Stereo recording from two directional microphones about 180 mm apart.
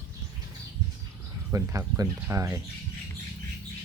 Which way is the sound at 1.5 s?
15° right (ahead or behind).